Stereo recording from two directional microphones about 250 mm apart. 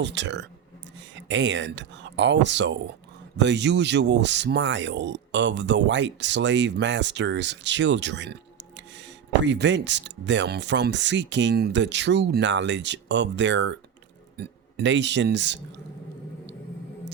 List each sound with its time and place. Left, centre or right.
0.0 s a man's voice: right